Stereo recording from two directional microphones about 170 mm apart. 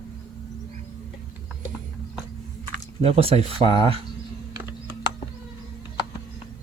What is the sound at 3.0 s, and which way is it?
Speech, 35° right (ahead or behind).